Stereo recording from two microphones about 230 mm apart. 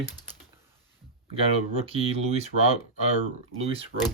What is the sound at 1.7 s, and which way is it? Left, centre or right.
Speech, right.